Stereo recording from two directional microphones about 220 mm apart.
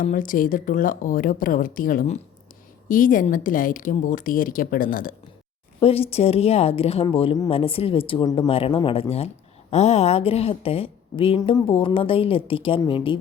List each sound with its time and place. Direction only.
0.0 s speech: 35° left (ahead or behind)
5.8 s speech: 25° left (ahead or behind)